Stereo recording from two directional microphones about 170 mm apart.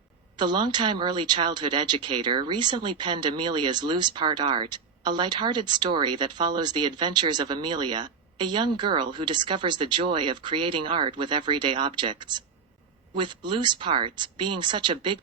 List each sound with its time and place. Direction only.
0.3 s speech: 25° right (ahead or behind)